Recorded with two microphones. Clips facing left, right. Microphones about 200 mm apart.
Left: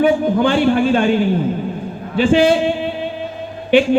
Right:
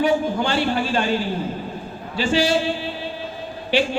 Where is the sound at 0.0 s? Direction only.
55° left (ahead or behind).